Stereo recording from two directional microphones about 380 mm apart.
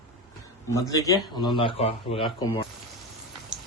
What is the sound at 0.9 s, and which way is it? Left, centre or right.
A man's voice, centre.